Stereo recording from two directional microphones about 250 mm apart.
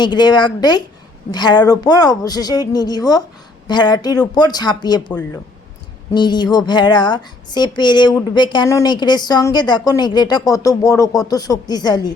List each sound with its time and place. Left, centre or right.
0.0 s a woman's voice: centre